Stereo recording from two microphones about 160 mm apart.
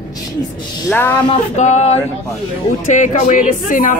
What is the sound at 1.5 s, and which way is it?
Speech, 45° left (ahead or behind).